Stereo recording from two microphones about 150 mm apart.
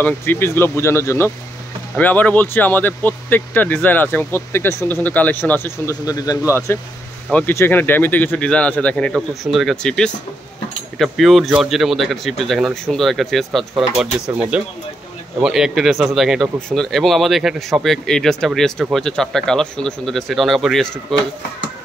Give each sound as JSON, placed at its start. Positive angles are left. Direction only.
{"t": 0.0, "sound": "speech", "side_deg": 15}
{"t": 6.0, "sound": "speech", "side_deg": 25}